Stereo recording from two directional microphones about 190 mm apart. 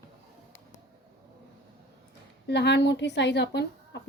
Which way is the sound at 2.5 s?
65° left (ahead or behind).